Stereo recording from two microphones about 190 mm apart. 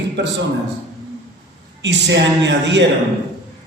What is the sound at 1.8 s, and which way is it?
A man's voice, 70° right (ahead or behind).